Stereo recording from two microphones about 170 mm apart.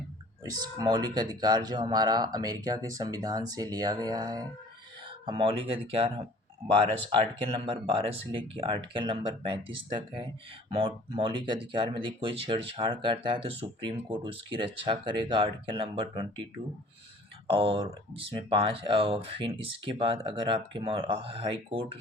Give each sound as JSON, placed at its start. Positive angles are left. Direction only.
{"t": 0.4, "sound": "speech", "side_deg": -25}
{"t": 17.5, "sound": "speech", "side_deg": -35}